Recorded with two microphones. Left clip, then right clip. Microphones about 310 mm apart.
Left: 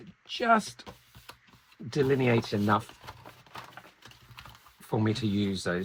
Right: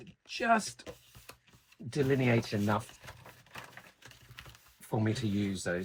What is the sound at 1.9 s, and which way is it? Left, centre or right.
Speech, centre.